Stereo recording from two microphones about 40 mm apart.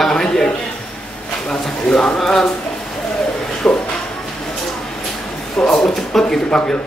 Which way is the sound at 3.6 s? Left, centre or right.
Left.